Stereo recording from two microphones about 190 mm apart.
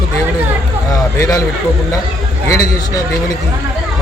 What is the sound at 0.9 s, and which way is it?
Speech, 15° left (ahead or behind).